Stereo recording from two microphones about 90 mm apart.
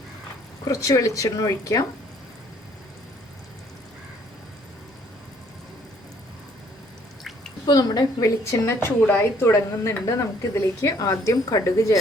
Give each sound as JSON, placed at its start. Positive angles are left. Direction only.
{"t": 0.7, "sound": "speech", "side_deg": 40}
{"t": 7.7, "sound": "a woman's voice", "side_deg": 45}
{"t": 8.4, "sound": "speech", "side_deg": 30}